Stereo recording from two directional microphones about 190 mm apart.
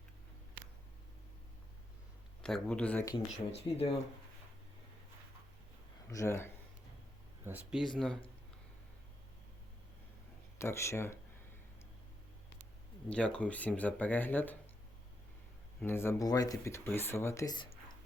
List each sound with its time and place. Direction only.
2.4 s speech: 5° left (ahead or behind)
3.5 s speech: 35° left (ahead or behind)
6.1 s speech: 15° left (ahead or behind)
7.4 s speech: 5° right (ahead or behind)
10.6 s speech: 15° left (ahead or behind)
13.1 s speech: 5° left (ahead or behind)
15.8 s speech: 10° left (ahead or behind)